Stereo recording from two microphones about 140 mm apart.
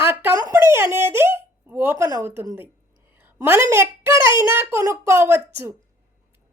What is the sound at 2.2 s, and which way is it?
A child's voice, 15° right (ahead or behind).